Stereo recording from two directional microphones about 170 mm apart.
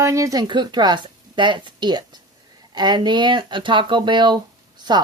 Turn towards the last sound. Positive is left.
turn(degrees=-25)  # may be behind; listen again after turning